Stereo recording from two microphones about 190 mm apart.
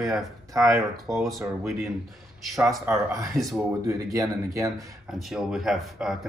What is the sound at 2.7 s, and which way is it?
Speech, 5° right (ahead or behind).